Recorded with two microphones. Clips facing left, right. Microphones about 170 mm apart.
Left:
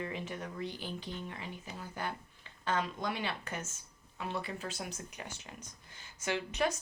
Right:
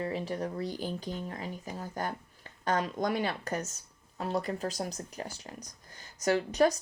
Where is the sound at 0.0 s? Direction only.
35° right (ahead or behind).